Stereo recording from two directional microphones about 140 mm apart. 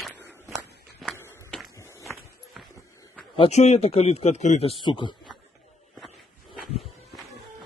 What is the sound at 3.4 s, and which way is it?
Speech, 50° left (ahead or behind).